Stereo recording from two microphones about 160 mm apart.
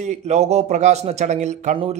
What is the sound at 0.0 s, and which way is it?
A man's voice, 45° right (ahead or behind).